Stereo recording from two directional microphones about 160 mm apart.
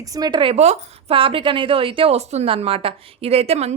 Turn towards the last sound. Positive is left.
turn(degrees=-40)  # may be behind; listen again after turning